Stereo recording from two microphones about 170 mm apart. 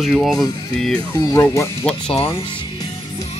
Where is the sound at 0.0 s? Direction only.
Centre (ahead or behind).